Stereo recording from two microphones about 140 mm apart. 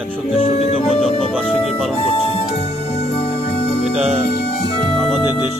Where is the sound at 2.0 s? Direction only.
40° left (ahead or behind).